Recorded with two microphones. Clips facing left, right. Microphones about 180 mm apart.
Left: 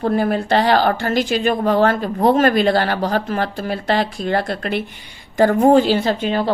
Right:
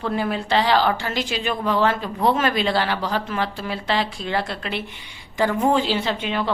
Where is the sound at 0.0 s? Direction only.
45° left (ahead or behind).